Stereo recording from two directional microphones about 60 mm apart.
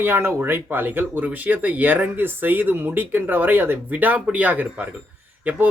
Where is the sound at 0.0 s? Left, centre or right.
Right.